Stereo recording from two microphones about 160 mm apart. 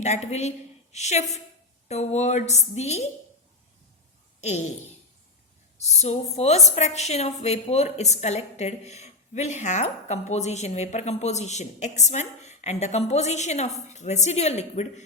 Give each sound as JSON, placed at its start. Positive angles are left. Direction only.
{"t": 0.0, "sound": "a woman's voice", "side_deg": 45}
{"t": 4.4, "sound": "a sound", "side_deg": 45}
{"t": 5.8, "sound": "a woman's voice", "side_deg": 45}